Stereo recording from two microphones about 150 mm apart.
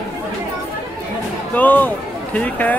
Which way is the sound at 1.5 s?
10° left (ahead or behind).